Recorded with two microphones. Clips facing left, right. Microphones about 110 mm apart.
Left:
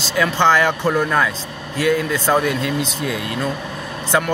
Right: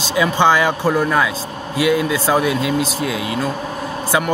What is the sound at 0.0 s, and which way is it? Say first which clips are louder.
A man's voice: right 1 dB; 15° right (ahead or behind).